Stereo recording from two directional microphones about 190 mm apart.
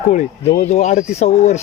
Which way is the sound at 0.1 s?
40° left (ahead or behind).